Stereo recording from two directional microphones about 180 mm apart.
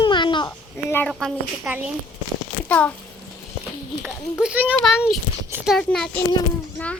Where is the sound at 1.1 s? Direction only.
Centre (ahead or behind).